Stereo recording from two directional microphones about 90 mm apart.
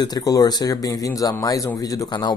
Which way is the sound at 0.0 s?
45° left (ahead or behind).